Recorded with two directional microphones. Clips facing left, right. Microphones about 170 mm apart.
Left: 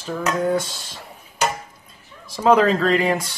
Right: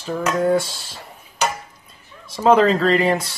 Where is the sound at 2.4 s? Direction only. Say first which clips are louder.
Right 1 dB; centre (ahead or behind).